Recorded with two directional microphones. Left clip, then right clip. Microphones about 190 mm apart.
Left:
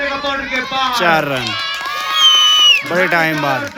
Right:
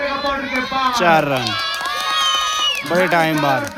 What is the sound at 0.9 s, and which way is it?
Speech, centre (ahead or behind).